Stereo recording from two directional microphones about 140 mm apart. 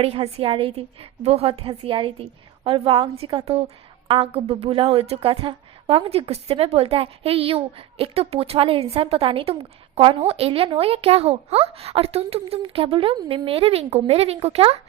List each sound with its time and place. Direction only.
0.0 s a woman's voice: 45° right (ahead or behind)